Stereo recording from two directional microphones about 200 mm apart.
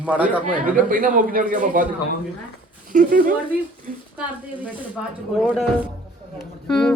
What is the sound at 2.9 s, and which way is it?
Speech, 45° right (ahead or behind).